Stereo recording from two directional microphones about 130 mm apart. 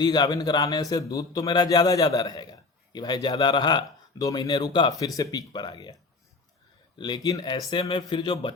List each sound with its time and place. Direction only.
0.0 s a man's voice: 30° left (ahead or behind)
7.0 s a man's voice: 30° left (ahead or behind)